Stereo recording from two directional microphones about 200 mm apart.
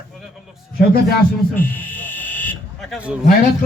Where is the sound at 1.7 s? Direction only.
10° left (ahead or behind).